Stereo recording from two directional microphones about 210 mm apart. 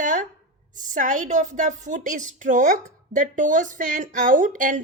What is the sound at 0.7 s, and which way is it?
A woman's voice, 35° right (ahead or behind).